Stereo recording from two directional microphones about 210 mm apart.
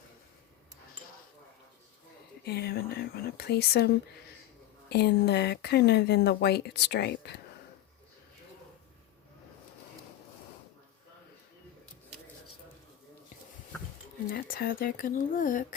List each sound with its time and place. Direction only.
2.4 s speech: 50° left (ahead or behind)
14.3 s speech: 45° left (ahead or behind)